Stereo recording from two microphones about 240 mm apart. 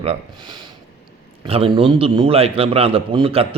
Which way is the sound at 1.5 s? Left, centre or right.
Right.